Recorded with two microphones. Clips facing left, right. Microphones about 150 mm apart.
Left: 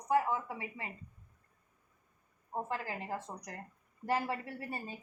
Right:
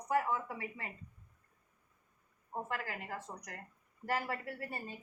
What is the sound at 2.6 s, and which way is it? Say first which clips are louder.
Speech: left 2 dB; 30° left (ahead or behind).